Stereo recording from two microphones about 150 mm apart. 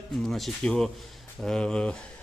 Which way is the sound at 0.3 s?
Centre (ahead or behind).